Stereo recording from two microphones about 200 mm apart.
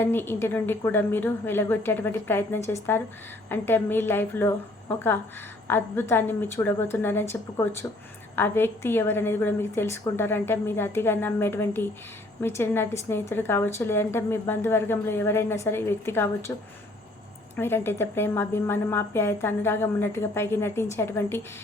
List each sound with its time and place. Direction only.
0.0 s a woman's voice: 10° left (ahead or behind)
17.6 s a woman's voice: 10° left (ahead or behind)